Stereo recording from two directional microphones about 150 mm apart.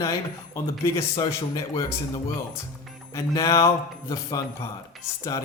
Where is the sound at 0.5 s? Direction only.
20° left (ahead or behind).